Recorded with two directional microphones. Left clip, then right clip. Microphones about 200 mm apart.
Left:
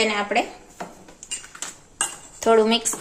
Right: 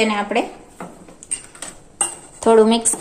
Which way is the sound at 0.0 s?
5° right (ahead or behind).